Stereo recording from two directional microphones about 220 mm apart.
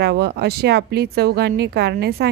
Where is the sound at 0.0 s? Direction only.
50° right (ahead or behind).